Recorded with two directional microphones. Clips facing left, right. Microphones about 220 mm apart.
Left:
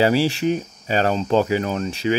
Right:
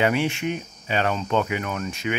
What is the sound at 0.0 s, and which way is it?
Speech, 35° left (ahead or behind).